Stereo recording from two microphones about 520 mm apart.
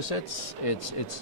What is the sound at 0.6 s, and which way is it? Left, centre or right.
Speech, left.